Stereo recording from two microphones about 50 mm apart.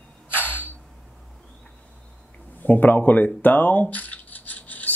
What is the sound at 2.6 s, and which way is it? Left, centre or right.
A man's voice, left.